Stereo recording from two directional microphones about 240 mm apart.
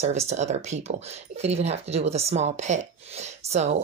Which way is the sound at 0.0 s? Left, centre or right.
Right.